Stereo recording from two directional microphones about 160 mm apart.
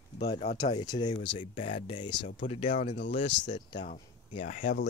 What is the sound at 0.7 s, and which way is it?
Speech, 25° left (ahead or behind).